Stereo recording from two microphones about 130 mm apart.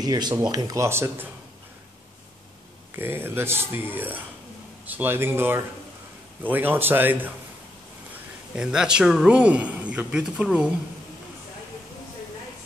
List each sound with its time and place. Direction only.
0.0 s speech: 30° right (ahead or behind)
3.0 s speech: 15° right (ahead or behind)
8.5 s speech: 5° right (ahead or behind)